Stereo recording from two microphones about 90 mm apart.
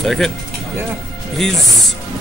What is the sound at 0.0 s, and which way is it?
Speech, 5° left (ahead or behind).